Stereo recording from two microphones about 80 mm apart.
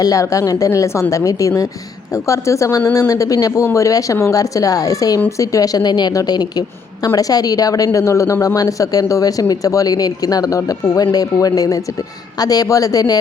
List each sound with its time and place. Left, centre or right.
0.0 s speech: left
3.6 s a woman's voice: left
7.9 s speech: left